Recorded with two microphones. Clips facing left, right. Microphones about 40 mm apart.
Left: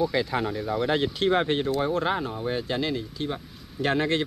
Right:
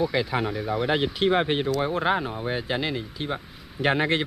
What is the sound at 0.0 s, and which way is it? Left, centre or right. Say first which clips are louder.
A man's voice: even; centre.